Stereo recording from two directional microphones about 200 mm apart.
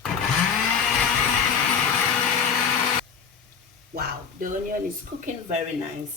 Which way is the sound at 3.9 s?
50° right (ahead or behind).